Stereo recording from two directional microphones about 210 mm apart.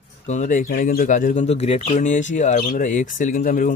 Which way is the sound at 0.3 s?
35° left (ahead or behind).